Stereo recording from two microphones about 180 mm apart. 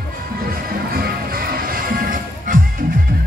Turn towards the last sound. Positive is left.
turn(degrees=-50)  # may be behind; listen again after turning